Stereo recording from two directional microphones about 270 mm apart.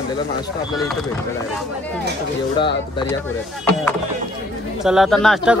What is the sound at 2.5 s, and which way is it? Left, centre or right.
Speech, centre.